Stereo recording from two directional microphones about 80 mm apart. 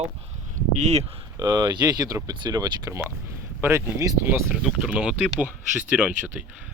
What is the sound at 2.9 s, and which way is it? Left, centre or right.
Speech, right.